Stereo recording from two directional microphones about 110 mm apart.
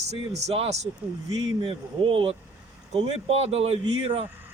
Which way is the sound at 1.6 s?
55° right (ahead or behind).